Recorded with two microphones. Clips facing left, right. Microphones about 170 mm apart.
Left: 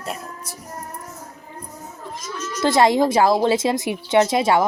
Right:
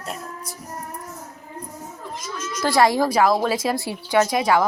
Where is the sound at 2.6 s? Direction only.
20° left (ahead or behind).